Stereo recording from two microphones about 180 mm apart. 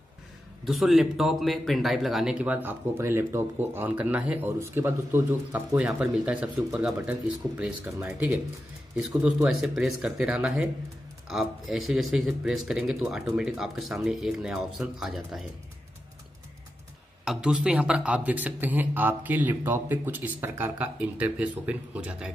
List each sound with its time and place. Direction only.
0.7 s speech: centre (ahead or behind)
17.2 s speech: 5° right (ahead or behind)